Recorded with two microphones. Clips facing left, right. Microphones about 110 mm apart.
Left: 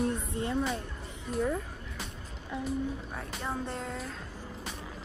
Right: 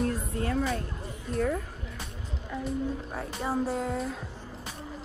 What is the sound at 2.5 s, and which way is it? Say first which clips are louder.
Speech: right 2 dB; centre (ahead or behind).